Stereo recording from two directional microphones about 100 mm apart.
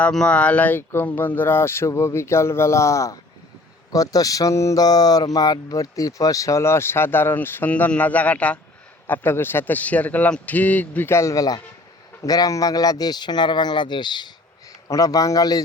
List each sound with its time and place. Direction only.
0.0 s speech: 10° left (ahead or behind); by 14.3 s 50° left (ahead or behind)
14.8 s speech: 35° left (ahead or behind)